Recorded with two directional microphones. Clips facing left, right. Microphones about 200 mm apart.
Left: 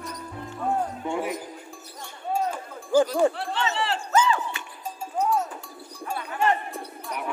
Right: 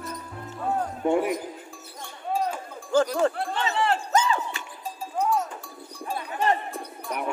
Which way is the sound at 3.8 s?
35° right (ahead or behind).